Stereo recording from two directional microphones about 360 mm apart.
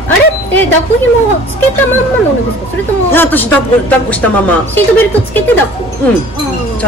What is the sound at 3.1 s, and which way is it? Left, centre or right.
Speech, centre.